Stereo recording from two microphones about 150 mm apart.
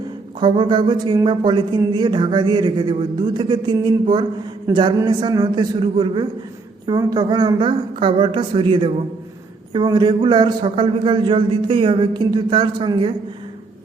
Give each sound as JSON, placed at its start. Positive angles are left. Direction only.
{"t": 0.3, "sound": "a man's voice", "side_deg": -30}